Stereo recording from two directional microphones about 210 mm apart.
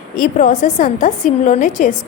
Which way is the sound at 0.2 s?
35° left (ahead or behind).